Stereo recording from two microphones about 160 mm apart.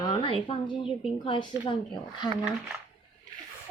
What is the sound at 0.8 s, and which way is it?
Speech, centre (ahead or behind).